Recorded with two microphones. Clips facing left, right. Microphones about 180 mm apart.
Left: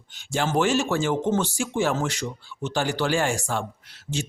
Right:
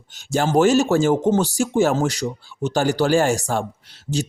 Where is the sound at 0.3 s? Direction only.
40° right (ahead or behind).